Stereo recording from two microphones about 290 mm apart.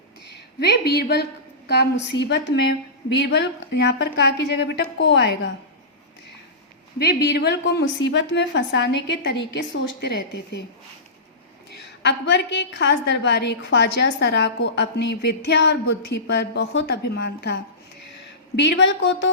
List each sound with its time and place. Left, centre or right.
0.3 s a woman's voice: left
7.0 s a woman's voice: left
12.0 s a woman's voice: left
18.8 s a woman's voice: left